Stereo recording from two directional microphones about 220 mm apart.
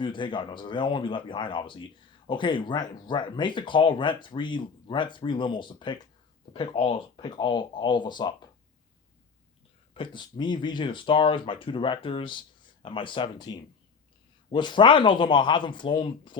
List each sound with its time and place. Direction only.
0.0 s speech: 20° left (ahead or behind)
9.9 s speech: 20° left (ahead or behind)